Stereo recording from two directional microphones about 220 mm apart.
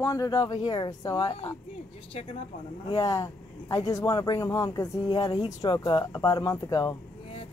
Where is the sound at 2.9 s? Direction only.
15° left (ahead or behind).